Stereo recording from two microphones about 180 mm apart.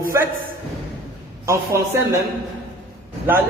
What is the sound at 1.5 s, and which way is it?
Speech, 15° right (ahead or behind).